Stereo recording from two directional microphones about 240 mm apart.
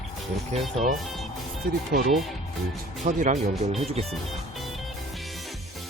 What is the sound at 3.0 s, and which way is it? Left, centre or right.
Speech, right.